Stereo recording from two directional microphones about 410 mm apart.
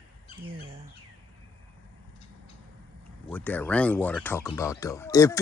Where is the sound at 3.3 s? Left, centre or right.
Centre.